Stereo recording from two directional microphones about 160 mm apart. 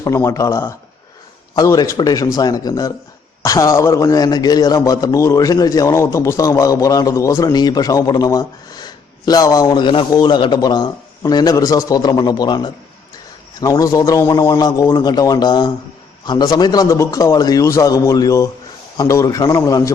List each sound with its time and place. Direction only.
0.0 s a man's voice: 20° left (ahead or behind)